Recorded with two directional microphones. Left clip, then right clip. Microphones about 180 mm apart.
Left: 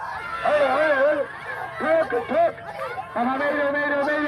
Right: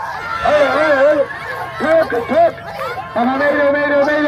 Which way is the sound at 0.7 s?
Centre (ahead or behind).